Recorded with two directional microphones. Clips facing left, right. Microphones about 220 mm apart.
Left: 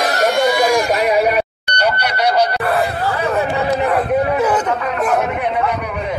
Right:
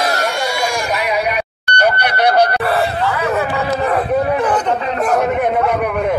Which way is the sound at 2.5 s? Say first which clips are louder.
Right 1 dB; centre (ahead or behind).